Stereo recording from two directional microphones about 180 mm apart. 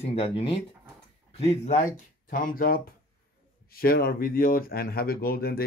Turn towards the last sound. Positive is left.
turn(degrees=55)  # may be behind; listen again after turning